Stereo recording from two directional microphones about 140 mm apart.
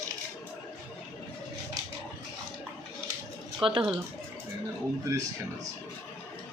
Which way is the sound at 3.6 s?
40° right (ahead or behind).